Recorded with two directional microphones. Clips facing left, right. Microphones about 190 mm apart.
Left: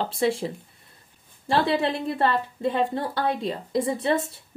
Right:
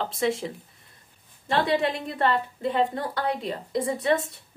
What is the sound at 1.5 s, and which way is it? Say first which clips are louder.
A woman's voice: left 1 dB; 30° left (ahead or behind).